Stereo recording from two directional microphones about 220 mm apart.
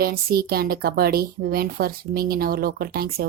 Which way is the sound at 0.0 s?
45° right (ahead or behind).